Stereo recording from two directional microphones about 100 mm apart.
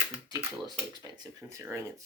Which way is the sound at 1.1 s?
35° right (ahead or behind).